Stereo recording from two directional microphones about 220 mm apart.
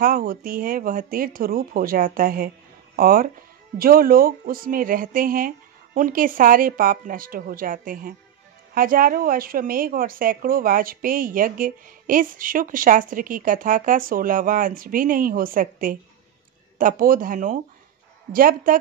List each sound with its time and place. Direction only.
0.0 s a woman's voice: 40° right (ahead or behind)